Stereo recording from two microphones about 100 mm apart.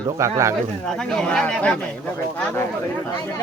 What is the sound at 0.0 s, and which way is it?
Speech, 30° right (ahead or behind).